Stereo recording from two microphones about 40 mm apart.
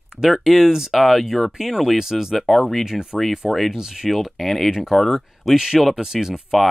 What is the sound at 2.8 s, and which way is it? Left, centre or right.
Speech, centre.